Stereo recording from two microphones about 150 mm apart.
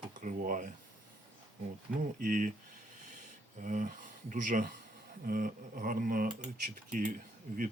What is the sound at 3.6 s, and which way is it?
Speech, 60° right (ahead or behind).